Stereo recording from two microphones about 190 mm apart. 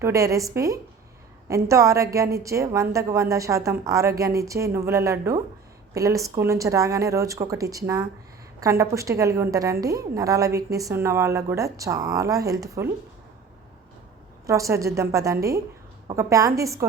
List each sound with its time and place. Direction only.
0.0 s a woman's voice: 15° right (ahead or behind)
14.4 s a woman's voice: 15° right (ahead or behind)